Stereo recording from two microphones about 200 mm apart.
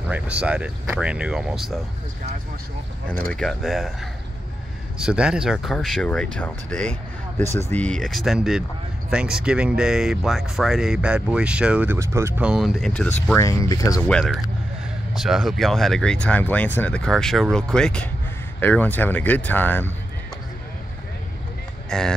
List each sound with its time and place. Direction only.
0.1 s speech: 5° right (ahead or behind)
3.3 s speech: centre (ahead or behind)
13.3 s speech: 15° left (ahead or behind)
14.0 s speech: centre (ahead or behind)
21.8 s speech: 5° left (ahead or behind)